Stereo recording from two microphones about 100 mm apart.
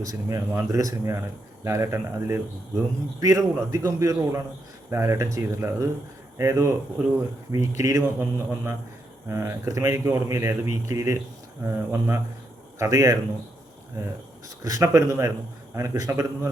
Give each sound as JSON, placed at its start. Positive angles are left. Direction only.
{"t": 0.0, "sound": "speech", "side_deg": -35}
{"t": 7.8, "sound": "speech", "side_deg": -35}